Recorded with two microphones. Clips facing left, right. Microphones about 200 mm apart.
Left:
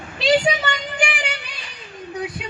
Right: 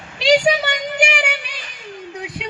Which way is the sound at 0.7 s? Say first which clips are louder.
Right 4 dB; 80° right.